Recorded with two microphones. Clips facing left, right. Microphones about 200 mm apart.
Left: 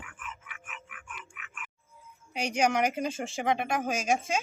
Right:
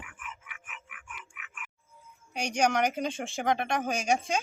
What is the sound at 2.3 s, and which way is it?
Speech, 5° left (ahead or behind).